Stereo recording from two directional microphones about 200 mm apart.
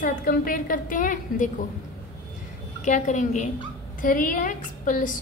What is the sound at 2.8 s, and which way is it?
A woman's voice, 40° left (ahead or behind).